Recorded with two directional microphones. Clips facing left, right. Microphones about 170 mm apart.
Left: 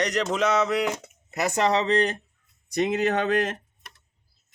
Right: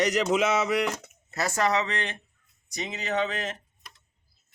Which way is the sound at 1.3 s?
20° left (ahead or behind).